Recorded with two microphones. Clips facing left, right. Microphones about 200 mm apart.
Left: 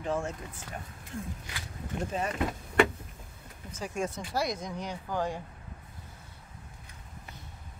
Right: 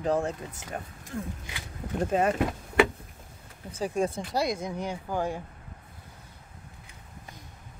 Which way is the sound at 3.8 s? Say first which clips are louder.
Right 6 dB; 35° right (ahead or behind).